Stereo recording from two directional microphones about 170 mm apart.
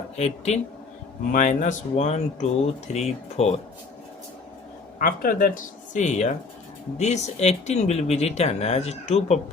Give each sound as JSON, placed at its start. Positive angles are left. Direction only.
{"t": 0.2, "sound": "speech", "side_deg": 40}
{"t": 1.3, "sound": "speech", "side_deg": 50}
{"t": 4.9, "sound": "speech", "side_deg": 55}